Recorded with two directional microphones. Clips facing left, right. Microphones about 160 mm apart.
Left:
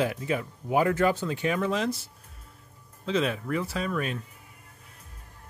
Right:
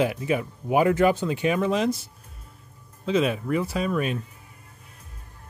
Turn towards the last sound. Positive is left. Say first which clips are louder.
# right 4 dB
turn(degrees=-15)  # may be behind; listen again after turning